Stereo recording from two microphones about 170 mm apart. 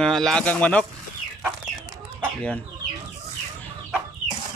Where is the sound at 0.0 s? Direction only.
5° left (ahead or behind).